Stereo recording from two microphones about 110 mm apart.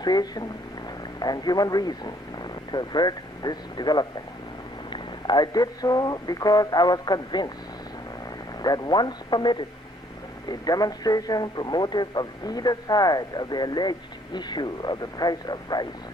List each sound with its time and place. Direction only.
0.0 s speech: 40° left (ahead or behind)
8.6 s speech: 40° left (ahead or behind)